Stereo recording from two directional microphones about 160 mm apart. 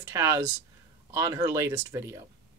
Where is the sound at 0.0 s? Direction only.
20° right (ahead or behind).